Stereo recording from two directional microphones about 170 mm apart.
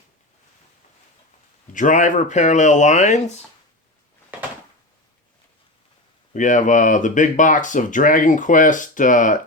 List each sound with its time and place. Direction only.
1.7 s speech: 50° left (ahead or behind)
6.3 s speech: 50° left (ahead or behind)